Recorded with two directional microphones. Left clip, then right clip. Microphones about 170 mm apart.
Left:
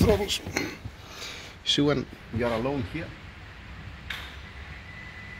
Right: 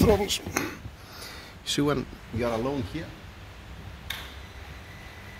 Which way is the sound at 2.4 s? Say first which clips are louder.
Left 1 dB; 30° left (ahead or behind).